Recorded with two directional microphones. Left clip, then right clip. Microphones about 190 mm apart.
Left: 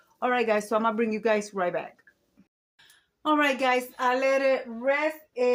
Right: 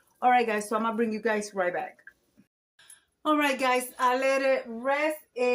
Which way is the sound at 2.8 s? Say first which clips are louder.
Left 1 dB; centre (ahead or behind).